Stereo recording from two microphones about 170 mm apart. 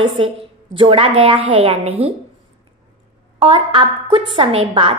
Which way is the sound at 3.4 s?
30° right (ahead or behind).